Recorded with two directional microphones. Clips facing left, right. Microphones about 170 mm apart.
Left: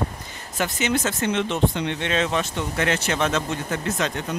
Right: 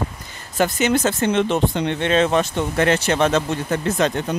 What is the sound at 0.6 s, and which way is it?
Speech, 40° right (ahead or behind).